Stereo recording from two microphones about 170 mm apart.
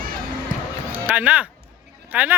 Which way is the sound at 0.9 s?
10° right (ahead or behind).